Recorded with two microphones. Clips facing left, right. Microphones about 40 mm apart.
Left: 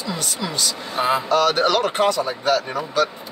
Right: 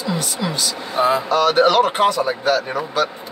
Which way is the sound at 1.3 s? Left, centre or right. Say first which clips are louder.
Right 3 dB; centre.